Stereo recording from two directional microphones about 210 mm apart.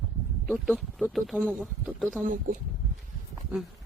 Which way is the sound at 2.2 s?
40° right (ahead or behind).